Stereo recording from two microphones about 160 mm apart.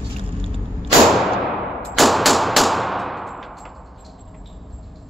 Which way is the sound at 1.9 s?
Centre (ahead or behind).